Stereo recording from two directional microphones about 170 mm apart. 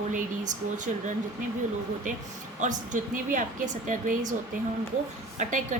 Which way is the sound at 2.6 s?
45° right (ahead or behind).